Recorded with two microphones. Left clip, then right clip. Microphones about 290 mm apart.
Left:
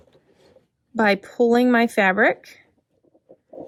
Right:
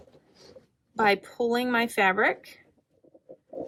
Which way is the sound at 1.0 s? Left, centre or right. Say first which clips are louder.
Left 5 dB; left.